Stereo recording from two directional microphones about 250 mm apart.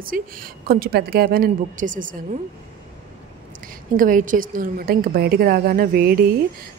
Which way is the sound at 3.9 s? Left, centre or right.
Right.